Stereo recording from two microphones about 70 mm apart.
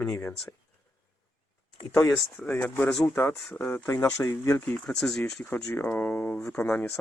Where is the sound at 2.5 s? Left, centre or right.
Left.